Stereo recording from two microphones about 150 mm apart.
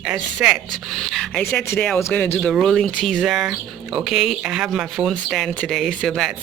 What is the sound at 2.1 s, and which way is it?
Speech, 15° left (ahead or behind).